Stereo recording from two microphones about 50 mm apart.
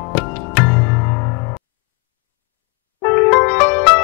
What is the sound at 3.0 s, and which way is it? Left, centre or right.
Music, left.